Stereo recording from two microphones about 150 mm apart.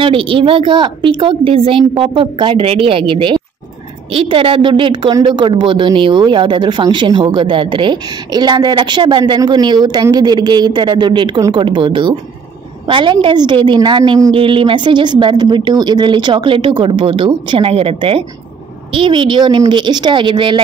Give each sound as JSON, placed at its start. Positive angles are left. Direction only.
{"t": 0.0, "sound": "a woman's voice", "side_deg": -35}